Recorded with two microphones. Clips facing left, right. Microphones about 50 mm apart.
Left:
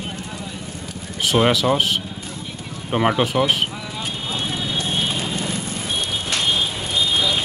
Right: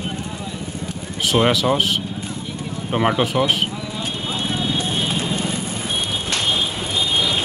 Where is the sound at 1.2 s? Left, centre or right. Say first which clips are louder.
Even; centre.